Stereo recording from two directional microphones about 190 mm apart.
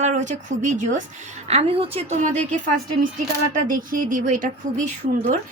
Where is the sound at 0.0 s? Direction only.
40° right (ahead or behind).